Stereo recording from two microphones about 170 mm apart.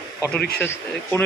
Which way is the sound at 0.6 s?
15° left (ahead or behind).